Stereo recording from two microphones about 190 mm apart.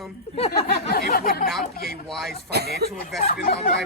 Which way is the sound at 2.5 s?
60° right (ahead or behind).